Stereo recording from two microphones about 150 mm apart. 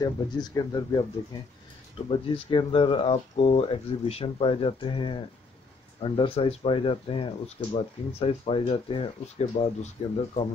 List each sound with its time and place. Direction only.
0.0 s speech: 25° left (ahead or behind)
2.0 s speech: 35° left (ahead or behind)